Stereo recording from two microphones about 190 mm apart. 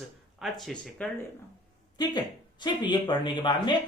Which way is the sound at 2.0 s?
25° left (ahead or behind).